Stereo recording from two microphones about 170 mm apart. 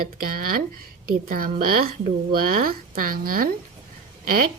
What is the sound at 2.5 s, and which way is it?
Speech, 55° right (ahead or behind).